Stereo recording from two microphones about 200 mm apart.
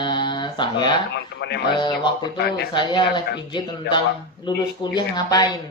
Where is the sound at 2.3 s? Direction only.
55° left (ahead or behind).